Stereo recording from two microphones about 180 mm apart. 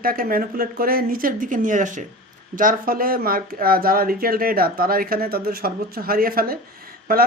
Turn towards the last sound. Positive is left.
turn(degrees=-55)  # may be behind; listen again after turning